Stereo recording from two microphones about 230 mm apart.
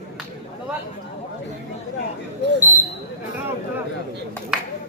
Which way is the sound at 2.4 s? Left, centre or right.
Right.